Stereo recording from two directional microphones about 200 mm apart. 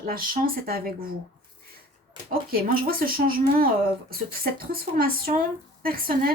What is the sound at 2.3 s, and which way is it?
Speech, 45° right (ahead or behind).